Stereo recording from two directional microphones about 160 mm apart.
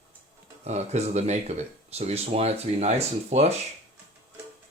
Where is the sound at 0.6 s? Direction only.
45° right (ahead or behind).